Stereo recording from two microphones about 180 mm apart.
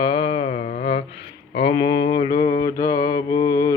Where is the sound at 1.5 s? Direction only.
30° left (ahead or behind).